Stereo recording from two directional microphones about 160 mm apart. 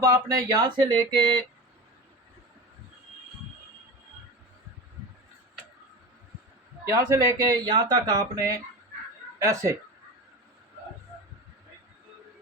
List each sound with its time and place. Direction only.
0.0 s speech: 20° right (ahead or behind)
6.8 s speech: 20° right (ahead or behind)